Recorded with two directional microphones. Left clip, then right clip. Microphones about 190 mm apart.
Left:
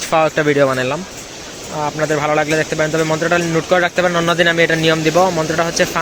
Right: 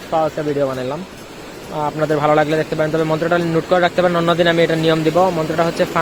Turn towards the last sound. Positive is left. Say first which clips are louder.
# left 1 dB
turn(degrees=0)  # may be behind; listen again after turning